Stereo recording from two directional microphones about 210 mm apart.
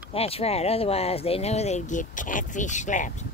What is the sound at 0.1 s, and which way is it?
Speech, 30° left (ahead or behind).